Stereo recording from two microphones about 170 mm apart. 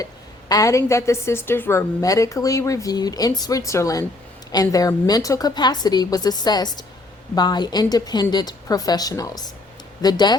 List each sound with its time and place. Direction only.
0.0 s a woman's voice: 20° left (ahead or behind)